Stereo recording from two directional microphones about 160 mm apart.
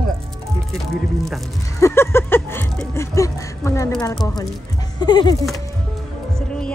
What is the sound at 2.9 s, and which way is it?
Speech, 15° left (ahead or behind).